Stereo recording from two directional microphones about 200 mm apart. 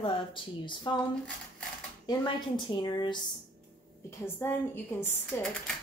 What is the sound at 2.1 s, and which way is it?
Speech, 20° left (ahead or behind).